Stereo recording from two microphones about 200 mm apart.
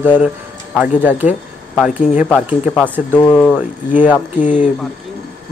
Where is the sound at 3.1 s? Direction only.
20° left (ahead or behind).